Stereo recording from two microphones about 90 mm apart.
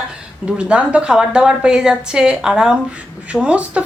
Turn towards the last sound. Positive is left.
turn(degrees=-15)  # may be behind; listen again after turning